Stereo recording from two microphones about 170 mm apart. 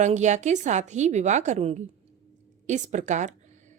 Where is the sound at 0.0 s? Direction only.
45° right (ahead or behind).